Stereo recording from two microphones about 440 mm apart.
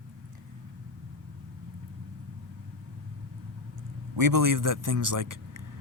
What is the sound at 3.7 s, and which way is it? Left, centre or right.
A man's voice, right.